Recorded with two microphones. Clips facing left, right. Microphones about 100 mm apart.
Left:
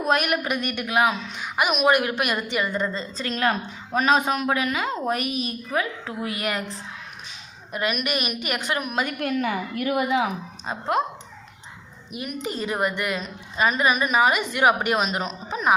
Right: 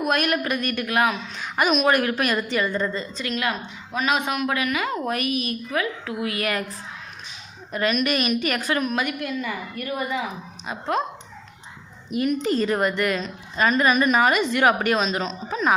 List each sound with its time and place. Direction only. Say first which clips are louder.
0.0 s a woman's voice: even; 20° left (ahead or behind)
7.7 s a woman's voice: right 3 dB; 10° left (ahead or behind)
9.2 s a woman's voice: left 4 dB; 65° left (ahead or behind); by 10.2 s 90° left
10.7 s a woman's voice: left 1 dB; 20° left (ahead or behind)
12.1 s a woman's voice: right 8 dB; 10° left (ahead or behind)